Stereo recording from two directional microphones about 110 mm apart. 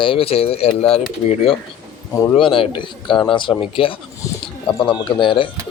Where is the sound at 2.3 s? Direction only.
55° left (ahead or behind).